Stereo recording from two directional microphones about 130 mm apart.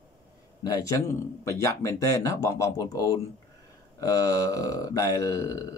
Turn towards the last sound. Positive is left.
turn(degrees=25)  # may be behind; listen again after turning